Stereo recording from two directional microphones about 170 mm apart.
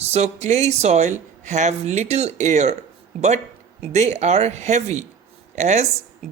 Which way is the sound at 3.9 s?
45° right (ahead or behind).